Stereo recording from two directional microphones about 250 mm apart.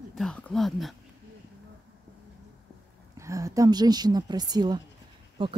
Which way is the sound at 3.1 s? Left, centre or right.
Centre.